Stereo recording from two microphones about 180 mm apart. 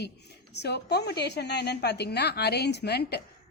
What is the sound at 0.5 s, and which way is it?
A woman's voice, 65° left (ahead or behind).